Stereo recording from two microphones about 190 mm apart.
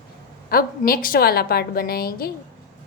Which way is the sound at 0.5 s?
50° left (ahead or behind).